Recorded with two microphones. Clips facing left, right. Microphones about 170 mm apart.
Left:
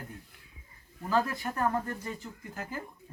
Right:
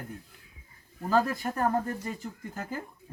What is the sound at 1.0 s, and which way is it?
Speech, 35° right (ahead or behind).